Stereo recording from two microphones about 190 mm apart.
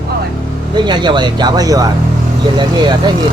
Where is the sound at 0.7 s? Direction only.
25° right (ahead or behind).